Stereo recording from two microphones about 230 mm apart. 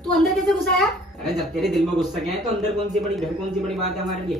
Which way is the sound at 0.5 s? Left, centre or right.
Centre.